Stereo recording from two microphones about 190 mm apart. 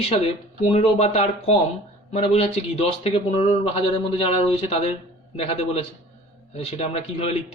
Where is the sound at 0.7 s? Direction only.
35° left (ahead or behind).